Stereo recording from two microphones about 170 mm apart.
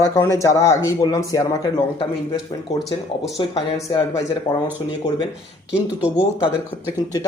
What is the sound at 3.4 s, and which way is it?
Speech, 30° left (ahead or behind).